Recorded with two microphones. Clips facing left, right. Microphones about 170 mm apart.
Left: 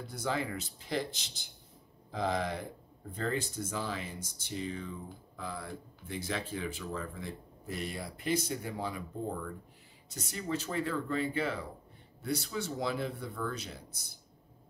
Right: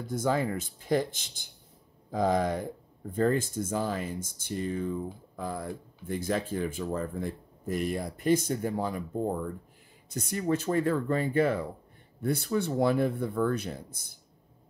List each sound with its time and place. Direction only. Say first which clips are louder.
0.0 s speech: right 7 dB; 45° right (ahead or behind)